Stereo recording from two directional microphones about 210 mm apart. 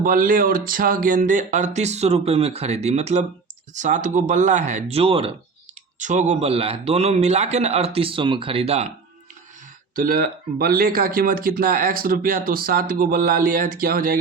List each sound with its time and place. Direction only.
0.0 s speech: 40° right (ahead or behind)
9.9 s speech: 40° right (ahead or behind)